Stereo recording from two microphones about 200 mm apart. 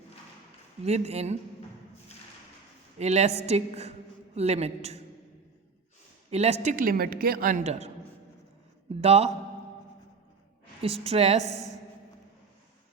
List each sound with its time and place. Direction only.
0.9 s a man's voice: 30° right (ahead or behind)
3.0 s a man's voice: 35° right (ahead or behind)
6.3 s a man's voice: 30° right (ahead or behind)
9.0 s speech: 30° right (ahead or behind)
10.8 s a woman's voice: 30° right (ahead or behind)